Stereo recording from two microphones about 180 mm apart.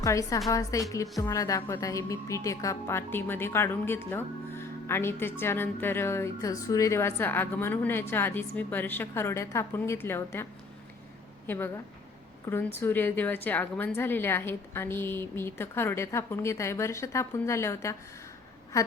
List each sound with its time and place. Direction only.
0.0 s a woman's voice: 15° left (ahead or behind)
11.4 s a woman's voice: 10° left (ahead or behind)
18.7 s a sound: 15° left (ahead or behind)